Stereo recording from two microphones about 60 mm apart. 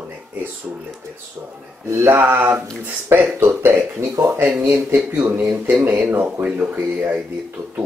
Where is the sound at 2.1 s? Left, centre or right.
Right.